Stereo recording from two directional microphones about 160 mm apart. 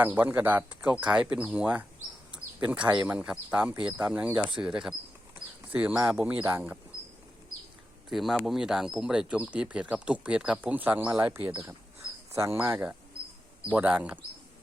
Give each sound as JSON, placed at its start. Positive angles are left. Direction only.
{"t": 0.0, "sound": "speech", "side_deg": -10}
{"t": 2.3, "sound": "bird", "side_deg": -5}
{"t": 3.1, "sound": "speech", "side_deg": -5}
{"t": 8.1, "sound": "speech", "side_deg": 0}